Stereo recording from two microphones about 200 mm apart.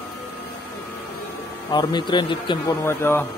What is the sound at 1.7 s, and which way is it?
Speech, 20° left (ahead or behind).